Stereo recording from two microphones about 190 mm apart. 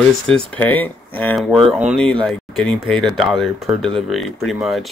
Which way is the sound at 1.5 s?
5° right (ahead or behind).